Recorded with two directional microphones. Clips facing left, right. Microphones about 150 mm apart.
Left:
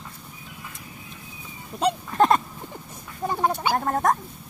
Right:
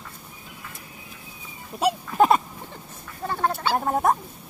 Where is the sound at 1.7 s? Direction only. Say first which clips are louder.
Right 1 dB; 5° right (ahead or behind).